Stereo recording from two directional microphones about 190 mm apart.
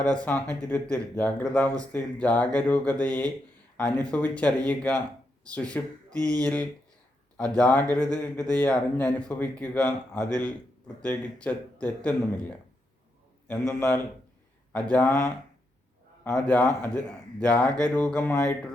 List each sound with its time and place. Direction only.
0.0 s speech: 5° left (ahead or behind)
6.1 s a sound: 20° right (ahead or behind)
6.3 s speech: 5° left (ahead or behind)
13.5 s speech: 10° left (ahead or behind)
16.3 s speech: 5° left (ahead or behind)